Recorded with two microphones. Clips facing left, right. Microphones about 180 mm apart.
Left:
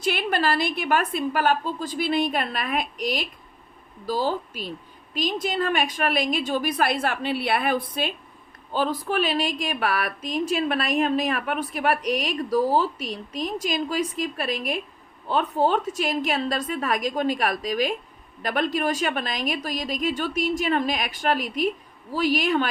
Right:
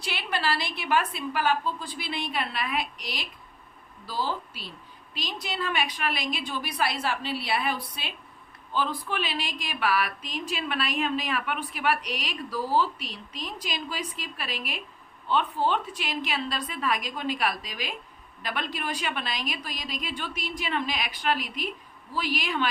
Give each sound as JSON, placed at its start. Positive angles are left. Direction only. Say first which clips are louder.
{"t": 0.0, "sound": "speech", "louder": "left 7 dB", "side_deg": 50}